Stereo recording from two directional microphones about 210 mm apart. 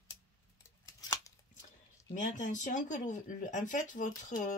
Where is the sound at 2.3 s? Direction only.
35° left (ahead or behind).